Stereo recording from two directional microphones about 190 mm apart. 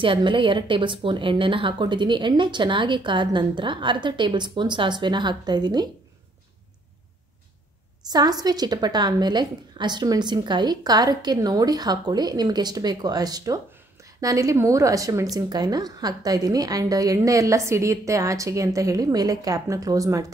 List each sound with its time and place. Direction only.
0.0 s a woman's voice: 25° right (ahead or behind)
8.1 s a woman's voice: 20° right (ahead or behind)